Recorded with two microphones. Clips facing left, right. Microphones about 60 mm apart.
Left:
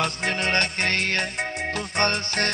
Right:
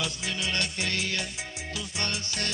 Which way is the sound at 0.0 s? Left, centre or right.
Left.